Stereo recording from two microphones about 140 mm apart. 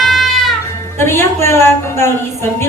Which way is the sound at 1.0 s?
20° left (ahead or behind).